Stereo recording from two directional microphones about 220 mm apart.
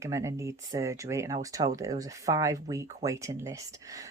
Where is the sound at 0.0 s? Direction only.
15° right (ahead or behind).